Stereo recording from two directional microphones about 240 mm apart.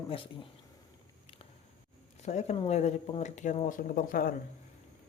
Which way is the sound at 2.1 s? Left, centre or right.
Left.